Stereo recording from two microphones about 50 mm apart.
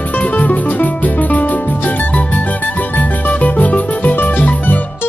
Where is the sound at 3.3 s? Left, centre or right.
Left.